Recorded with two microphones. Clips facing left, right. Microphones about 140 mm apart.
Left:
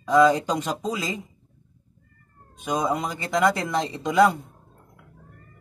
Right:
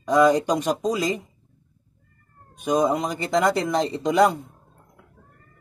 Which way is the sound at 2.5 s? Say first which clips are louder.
Right 4 dB; 15° right (ahead or behind).